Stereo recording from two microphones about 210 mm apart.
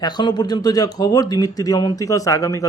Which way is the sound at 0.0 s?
20° left (ahead or behind).